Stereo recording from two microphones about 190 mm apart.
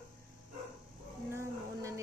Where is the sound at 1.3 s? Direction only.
15° right (ahead or behind).